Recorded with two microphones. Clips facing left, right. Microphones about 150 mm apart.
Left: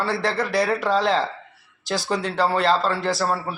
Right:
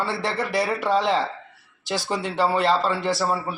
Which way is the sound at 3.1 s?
10° right (ahead or behind).